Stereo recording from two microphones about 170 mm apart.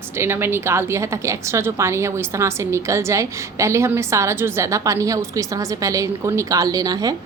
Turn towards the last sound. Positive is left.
turn(degrees=-20)  # may be behind; listen again after turning